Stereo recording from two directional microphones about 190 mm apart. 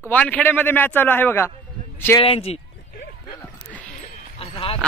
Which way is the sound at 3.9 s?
30° left (ahead or behind).